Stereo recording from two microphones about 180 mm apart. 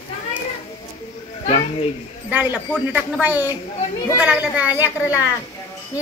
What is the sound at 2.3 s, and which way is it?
A child's voice, 10° right (ahead or behind).